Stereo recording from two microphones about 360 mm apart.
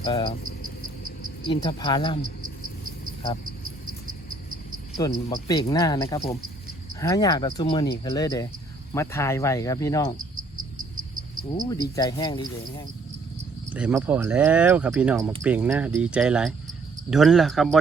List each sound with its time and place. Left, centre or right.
0.0 s speech: centre
1.5 s speech: centre
4.9 s speech: centre
10.3 s cricket: right
11.7 s speech: centre
13.7 s speech: centre